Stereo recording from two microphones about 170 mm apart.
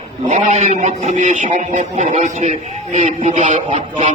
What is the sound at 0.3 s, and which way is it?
A man's voice, 45° right (ahead or behind).